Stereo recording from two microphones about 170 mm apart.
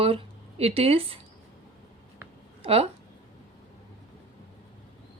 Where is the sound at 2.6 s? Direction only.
35° right (ahead or behind).